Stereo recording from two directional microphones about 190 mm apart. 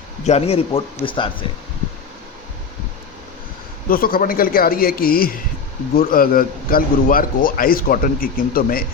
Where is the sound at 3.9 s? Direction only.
50° left (ahead or behind).